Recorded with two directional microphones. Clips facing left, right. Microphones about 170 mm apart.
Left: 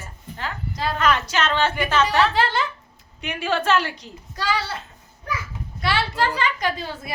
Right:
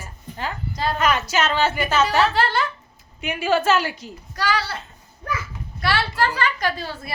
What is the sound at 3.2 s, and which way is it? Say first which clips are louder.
Speech: right 3 dB; 5° right (ahead or behind).